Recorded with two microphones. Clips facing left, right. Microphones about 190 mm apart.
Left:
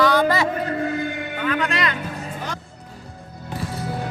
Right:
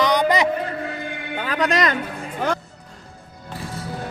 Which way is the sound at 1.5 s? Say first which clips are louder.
Right 3 dB; 40° right (ahead or behind).